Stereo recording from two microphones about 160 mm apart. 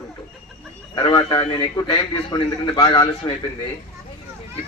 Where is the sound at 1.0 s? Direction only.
30° left (ahead or behind).